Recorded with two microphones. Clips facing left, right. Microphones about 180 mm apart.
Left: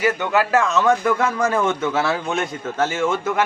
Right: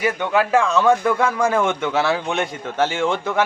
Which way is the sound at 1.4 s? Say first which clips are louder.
Right 1 dB; 10° right (ahead or behind).